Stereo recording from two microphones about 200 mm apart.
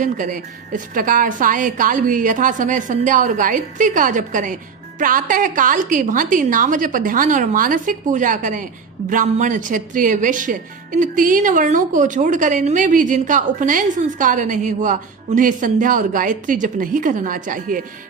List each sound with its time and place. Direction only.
0.0 s a woman's voice: 40° right (ahead or behind)